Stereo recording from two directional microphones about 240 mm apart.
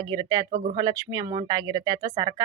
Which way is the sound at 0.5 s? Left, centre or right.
Right.